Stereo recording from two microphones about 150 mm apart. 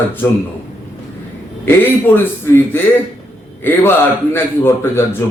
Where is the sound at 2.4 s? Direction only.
15° left (ahead or behind).